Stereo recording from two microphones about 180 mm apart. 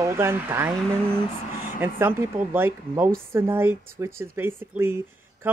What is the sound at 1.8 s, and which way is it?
Speech, 10° right (ahead or behind).